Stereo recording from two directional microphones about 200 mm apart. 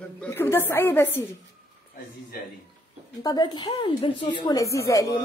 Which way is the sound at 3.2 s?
20° left (ahead or behind).